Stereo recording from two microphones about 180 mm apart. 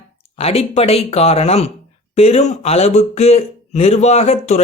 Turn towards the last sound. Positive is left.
turn(degrees=35)  # may be behind; listen again after turning